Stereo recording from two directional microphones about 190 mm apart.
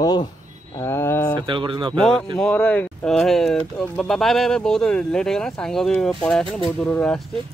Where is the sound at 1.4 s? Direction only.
25° right (ahead or behind).